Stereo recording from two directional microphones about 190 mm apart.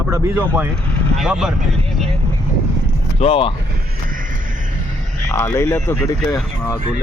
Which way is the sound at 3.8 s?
50° right (ahead or behind).